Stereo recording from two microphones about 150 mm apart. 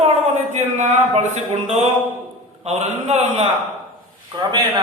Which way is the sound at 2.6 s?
45° right (ahead or behind).